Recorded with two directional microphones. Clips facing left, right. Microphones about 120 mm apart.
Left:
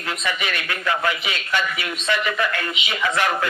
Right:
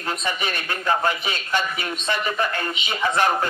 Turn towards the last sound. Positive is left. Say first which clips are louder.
# right 1 dB
turn(degrees=-35)  # may be behind; listen again after turning